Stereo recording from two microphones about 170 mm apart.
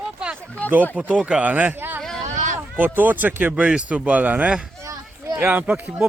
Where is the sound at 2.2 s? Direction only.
45° right (ahead or behind).